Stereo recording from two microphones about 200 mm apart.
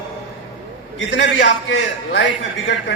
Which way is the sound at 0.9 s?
65° left (ahead or behind).